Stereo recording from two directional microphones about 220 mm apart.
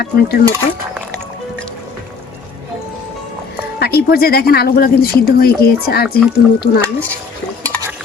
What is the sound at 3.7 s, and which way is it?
Speech, 45° left (ahead or behind).